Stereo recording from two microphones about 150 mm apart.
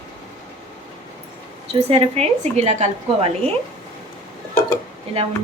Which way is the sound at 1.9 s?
40° right (ahead or behind).